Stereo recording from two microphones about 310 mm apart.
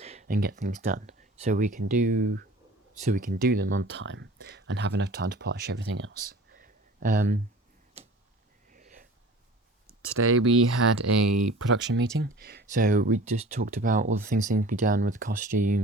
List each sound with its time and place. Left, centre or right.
0.0 s speech: right
8.0 s tick-tock: right
8.7 s wheeze: right
10.2 s speech: right
11.5 s speech: right